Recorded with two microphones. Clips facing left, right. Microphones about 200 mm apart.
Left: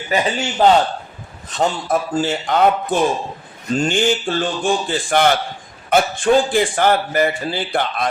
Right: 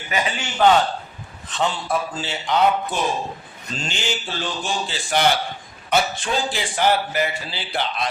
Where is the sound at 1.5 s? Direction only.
40° left (ahead or behind).